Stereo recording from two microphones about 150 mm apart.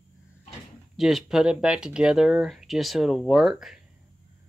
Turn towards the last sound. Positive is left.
turn(degrees=0)  # may be behind; listen again after turning